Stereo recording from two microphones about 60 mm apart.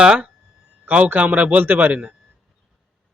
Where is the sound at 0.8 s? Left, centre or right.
Right.